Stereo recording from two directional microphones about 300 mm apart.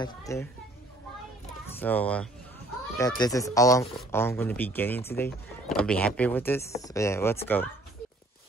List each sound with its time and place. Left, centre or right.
0.0 s speech: centre
1.8 s speech: centre